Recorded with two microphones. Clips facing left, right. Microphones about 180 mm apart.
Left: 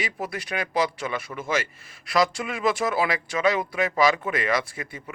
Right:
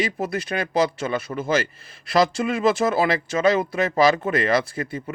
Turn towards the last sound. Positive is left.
turn(degrees=-30)  # may be behind; listen again after turning